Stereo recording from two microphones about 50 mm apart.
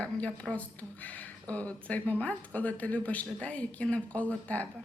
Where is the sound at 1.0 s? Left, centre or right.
Left.